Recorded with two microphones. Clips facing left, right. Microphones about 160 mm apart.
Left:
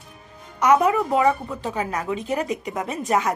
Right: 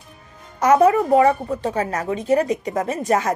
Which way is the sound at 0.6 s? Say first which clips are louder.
Right 3 dB; 45° right (ahead or behind).